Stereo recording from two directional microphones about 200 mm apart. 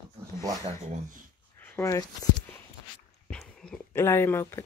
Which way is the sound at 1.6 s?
10° left (ahead or behind).